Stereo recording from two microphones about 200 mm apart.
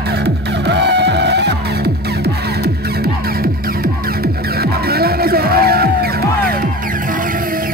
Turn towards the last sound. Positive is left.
turn(degrees=-40)  # may be behind; listen again after turning